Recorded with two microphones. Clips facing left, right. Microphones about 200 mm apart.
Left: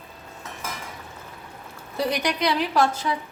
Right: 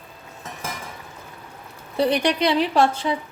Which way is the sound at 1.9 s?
30° right (ahead or behind).